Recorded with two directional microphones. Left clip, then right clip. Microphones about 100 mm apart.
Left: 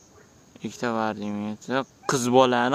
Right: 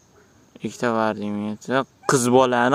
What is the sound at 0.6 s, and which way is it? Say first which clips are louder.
Speech: right 5 dB; 40° right (ahead or behind).